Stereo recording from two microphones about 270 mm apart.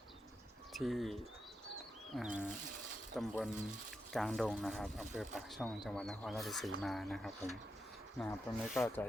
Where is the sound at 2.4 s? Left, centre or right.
Right.